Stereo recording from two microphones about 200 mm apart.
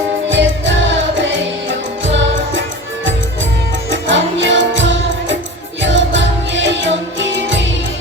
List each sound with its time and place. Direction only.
0.3 s music: 65° right (ahead or behind)
3.9 s music: 65° right (ahead or behind)